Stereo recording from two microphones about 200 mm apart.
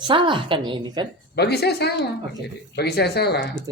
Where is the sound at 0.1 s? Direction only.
25° right (ahead or behind).